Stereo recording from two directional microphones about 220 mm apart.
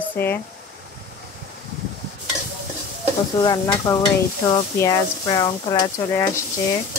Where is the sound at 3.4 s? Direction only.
20° left (ahead or behind).